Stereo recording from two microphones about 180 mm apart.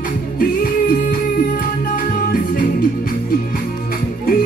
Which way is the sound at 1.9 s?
50° left (ahead or behind).